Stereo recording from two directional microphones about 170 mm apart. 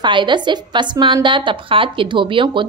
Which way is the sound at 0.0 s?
25° right (ahead or behind).